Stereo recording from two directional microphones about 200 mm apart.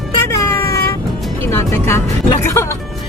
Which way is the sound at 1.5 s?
15° left (ahead or behind).